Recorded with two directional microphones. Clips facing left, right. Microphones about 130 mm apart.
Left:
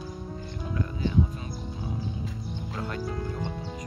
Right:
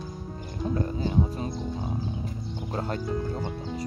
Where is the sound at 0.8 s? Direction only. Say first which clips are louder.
Left 1 dB; 35° right (ahead or behind).